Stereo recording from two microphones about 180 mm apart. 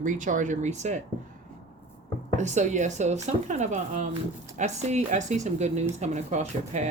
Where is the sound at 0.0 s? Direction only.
45° right (ahead or behind).